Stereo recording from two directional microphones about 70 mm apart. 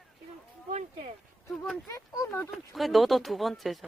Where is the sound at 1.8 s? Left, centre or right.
Left.